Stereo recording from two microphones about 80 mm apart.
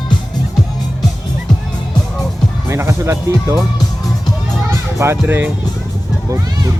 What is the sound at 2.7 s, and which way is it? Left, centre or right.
Music, right.